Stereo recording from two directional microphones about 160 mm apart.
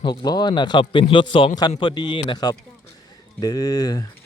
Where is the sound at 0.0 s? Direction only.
25° left (ahead or behind).